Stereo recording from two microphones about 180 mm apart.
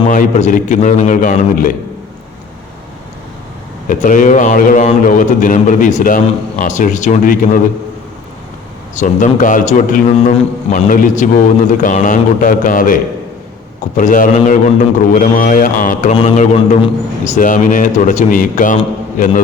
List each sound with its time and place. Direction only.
0.1 s a man's voice: 45° left (ahead or behind)
3.8 s a man's voice: 45° left (ahead or behind)
9.0 s a man's voice: 45° left (ahead or behind)